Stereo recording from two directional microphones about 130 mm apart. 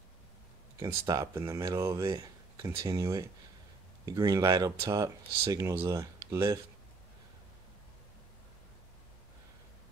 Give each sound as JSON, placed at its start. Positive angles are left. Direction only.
{"t": 0.7, "sound": "speech", "side_deg": -30}